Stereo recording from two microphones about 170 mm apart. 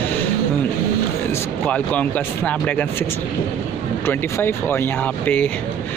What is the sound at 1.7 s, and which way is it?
Speech, 10° left (ahead or behind).